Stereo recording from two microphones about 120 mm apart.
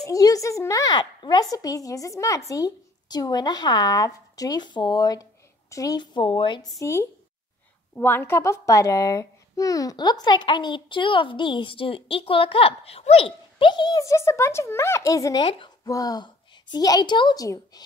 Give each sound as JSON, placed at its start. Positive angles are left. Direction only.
{"t": 0.0, "sound": "a child's voice", "side_deg": 30}
{"t": 6.8, "sound": "a child's voice", "side_deg": 25}
{"t": 15.4, "sound": "speech", "side_deg": 45}
{"t": 15.9, "sound": "a child's voice", "side_deg": 30}